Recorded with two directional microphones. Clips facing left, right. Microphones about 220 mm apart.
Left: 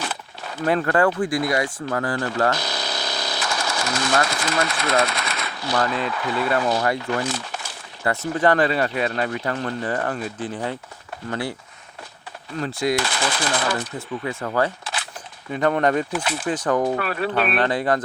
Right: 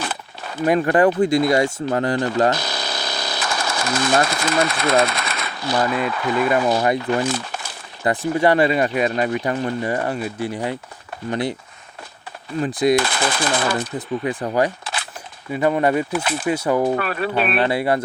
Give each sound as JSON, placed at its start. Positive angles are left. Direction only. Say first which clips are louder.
{"t": 0.0, "sound": "a sound", "louder": "right 2 dB", "side_deg": -55}
{"t": 0.6, "sound": "speech", "louder": "right 4 dB", "side_deg": -15}
{"t": 2.6, "sound": "sewing machine", "louder": "right 1 dB", "side_deg": -55}
{"t": 5.8, "sound": "speech", "louder": "right 4 dB", "side_deg": -10}
{"t": 7.3, "sound": "a sound", "louder": "right 4 dB", "side_deg": -55}
{"t": 8.0, "sound": "speech", "louder": "right 3 dB", "side_deg": -15}
{"t": 12.5, "sound": "speech", "louder": "right 5 dB", "side_deg": -15}
{"t": 13.0, "sound": "speech", "louder": "right 3 dB", "side_deg": -55}
{"t": 14.3, "sound": "speech", "louder": "right 2 dB", "side_deg": -15}
{"t": 16.2, "sound": "speech", "louder": "right 3 dB", "side_deg": -55}
{"t": 16.5, "sound": "speech", "louder": "right 2 dB", "side_deg": -10}
{"t": 17.0, "sound": "speech", "louder": "right 1 dB", "side_deg": -50}
{"t": 17.3, "sound": "speech", "louder": "right 2 dB", "side_deg": -10}